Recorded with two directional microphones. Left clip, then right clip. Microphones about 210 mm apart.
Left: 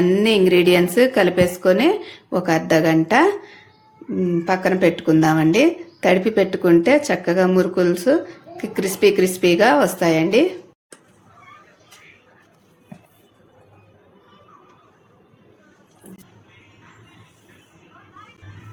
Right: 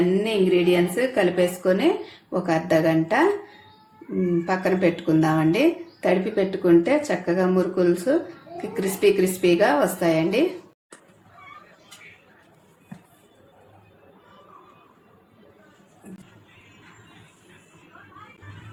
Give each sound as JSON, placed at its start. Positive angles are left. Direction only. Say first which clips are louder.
{"t": 0.2, "sound": "a woman's voice", "louder": "left 6 dB", "side_deg": 50}
{"t": 4.4, "sound": "a woman's voice", "louder": "left 6 dB", "side_deg": 35}